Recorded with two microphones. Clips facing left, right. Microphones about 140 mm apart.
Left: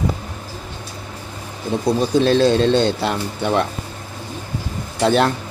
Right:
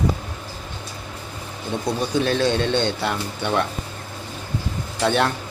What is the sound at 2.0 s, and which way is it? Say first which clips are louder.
A man's voice: left 6 dB; 30° left (ahead or behind).